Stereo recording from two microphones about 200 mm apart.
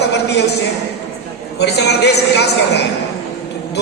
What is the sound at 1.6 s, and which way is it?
Speech, 55° left (ahead or behind).